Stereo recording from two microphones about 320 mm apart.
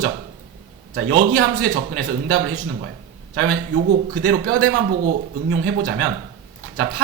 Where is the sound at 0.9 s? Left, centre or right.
Right.